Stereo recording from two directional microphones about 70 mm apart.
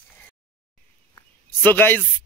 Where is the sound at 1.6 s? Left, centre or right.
Left.